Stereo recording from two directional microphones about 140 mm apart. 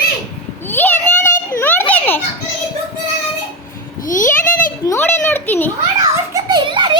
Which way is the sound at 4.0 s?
70° left (ahead or behind).